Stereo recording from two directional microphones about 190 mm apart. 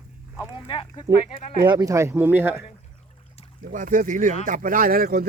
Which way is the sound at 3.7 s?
45° right (ahead or behind).